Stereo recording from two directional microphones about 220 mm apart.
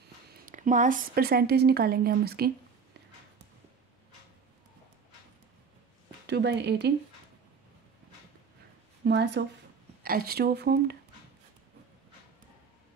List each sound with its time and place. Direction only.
0.5 s speech: 35° right (ahead or behind)
6.2 s speech: 50° right (ahead or behind)
9.0 s speech: 50° right (ahead or behind)